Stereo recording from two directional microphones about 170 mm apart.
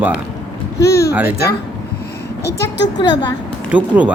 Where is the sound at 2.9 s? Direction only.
25° left (ahead or behind).